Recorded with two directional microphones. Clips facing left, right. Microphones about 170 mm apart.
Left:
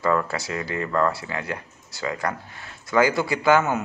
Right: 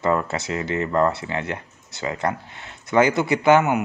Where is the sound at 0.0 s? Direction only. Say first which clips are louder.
Right 1 dB; 20° right (ahead or behind).